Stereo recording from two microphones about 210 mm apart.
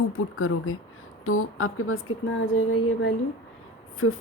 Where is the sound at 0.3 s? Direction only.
75° left (ahead or behind).